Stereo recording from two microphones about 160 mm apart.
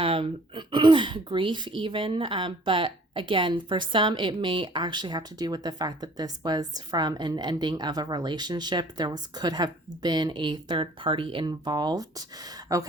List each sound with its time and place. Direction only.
0.0 s speech: 35° right (ahead or behind)